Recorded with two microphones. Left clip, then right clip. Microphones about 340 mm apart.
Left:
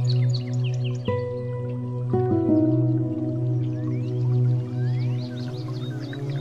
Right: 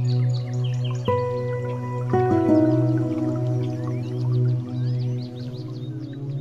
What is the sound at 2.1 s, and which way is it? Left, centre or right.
Music, right.